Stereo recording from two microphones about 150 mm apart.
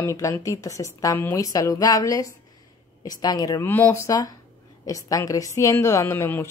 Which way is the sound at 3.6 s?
15° left (ahead or behind).